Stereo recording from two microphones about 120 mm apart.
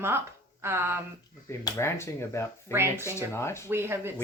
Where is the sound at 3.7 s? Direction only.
20° right (ahead or behind).